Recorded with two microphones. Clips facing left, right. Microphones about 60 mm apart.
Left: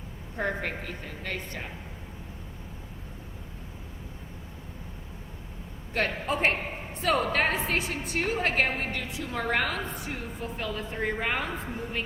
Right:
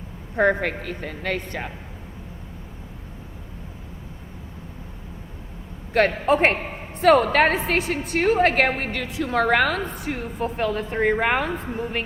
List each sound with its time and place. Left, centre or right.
0.3 s speech: right
5.9 s a woman's voice: right